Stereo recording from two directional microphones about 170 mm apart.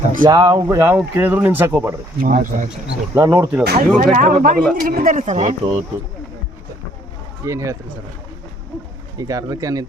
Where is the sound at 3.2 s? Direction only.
15° right (ahead or behind).